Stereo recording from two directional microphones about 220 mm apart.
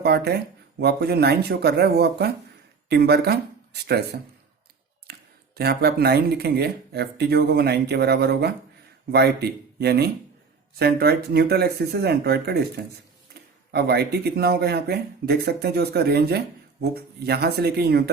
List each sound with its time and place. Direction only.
0.0 s speech: 50° right (ahead or behind)
5.1 s a sound: 45° right (ahead or behind)
5.5 s speech: 45° right (ahead or behind)